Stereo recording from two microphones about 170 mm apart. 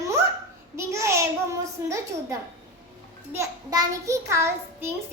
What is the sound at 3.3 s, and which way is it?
Child singing, 20° right (ahead or behind).